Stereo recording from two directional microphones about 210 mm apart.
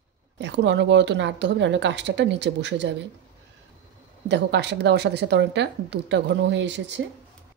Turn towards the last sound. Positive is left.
turn(degrees=-55)  # may be behind; listen again after turning